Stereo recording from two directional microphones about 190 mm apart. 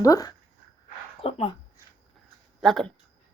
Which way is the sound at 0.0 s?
20° left (ahead or behind).